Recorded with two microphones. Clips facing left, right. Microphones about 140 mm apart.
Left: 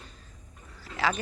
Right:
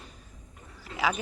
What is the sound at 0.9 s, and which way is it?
Speech, 5° right (ahead or behind).